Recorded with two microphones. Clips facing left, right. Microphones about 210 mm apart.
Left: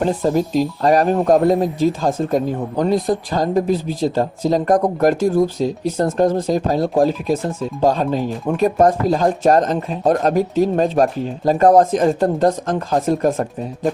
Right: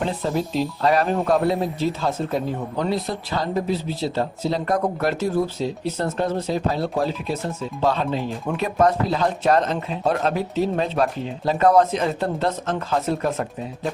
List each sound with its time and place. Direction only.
0.0 s speech: 45° left (ahead or behind)